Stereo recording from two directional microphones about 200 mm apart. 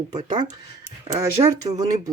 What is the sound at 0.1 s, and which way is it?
Speech, 20° right (ahead or behind).